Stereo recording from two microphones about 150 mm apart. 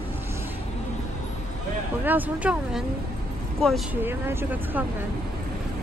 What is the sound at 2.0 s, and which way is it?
Speech, 10° right (ahead or behind).